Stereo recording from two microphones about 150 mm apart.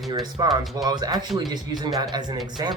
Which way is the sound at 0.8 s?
25° right (ahead or behind).